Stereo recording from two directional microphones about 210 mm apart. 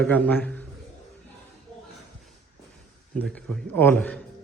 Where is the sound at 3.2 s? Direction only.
5° left (ahead or behind).